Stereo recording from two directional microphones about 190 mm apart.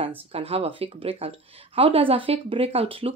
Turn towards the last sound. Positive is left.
turn(degrees=-30)  # may be behind; listen again after turning